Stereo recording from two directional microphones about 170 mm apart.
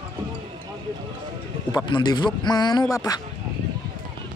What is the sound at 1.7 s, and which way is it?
A man's voice, 25° left (ahead or behind).